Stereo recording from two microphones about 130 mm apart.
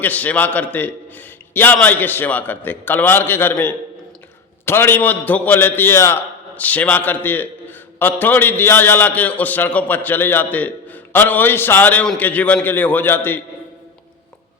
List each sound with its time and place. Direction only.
0.0 s a man's voice: 10° left (ahead or behind)